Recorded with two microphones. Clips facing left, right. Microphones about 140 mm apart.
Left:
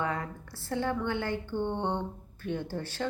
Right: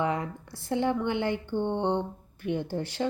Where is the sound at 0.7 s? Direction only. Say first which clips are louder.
Right 4 dB; 15° right (ahead or behind).